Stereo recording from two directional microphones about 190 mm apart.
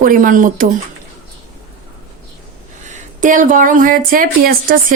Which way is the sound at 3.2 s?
45° right (ahead or behind).